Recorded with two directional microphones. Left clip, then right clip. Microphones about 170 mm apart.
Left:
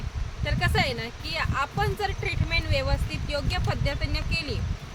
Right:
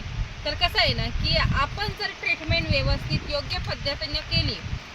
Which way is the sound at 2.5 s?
20° left (ahead or behind).